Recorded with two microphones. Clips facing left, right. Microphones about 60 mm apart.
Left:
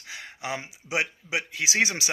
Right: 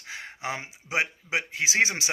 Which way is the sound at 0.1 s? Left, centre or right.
Right.